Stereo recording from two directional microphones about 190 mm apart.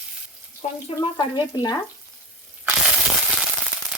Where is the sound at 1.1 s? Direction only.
25° left (ahead or behind).